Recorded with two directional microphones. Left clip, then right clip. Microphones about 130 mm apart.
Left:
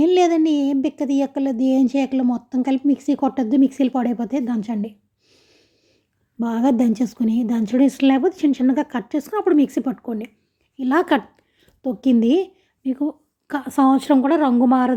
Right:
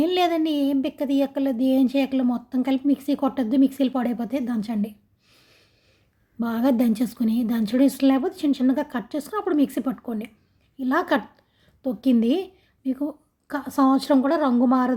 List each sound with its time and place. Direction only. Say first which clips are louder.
0.0 s a woman's voice: left 5 dB; 40° left (ahead or behind)